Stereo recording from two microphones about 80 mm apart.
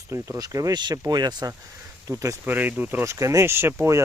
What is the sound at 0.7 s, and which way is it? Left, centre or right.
Speech, right.